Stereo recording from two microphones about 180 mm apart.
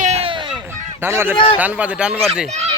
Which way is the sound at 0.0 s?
35° right (ahead or behind).